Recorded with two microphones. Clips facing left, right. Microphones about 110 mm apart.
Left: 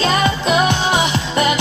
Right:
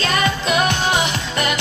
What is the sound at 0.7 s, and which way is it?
Music, 20° left (ahead or behind).